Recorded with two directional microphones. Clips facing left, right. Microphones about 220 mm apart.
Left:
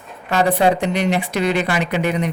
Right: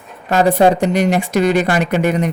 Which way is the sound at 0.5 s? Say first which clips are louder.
Right 4 dB; 45° right (ahead or behind).